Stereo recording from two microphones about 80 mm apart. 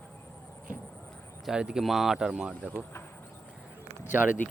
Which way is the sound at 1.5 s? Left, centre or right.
Centre.